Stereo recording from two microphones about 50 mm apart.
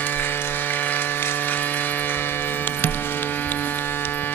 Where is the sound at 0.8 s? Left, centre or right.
Left.